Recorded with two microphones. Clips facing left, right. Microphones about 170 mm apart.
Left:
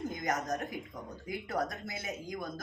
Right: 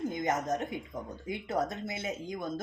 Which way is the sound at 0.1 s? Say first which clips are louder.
Right 3 dB; 25° right (ahead or behind).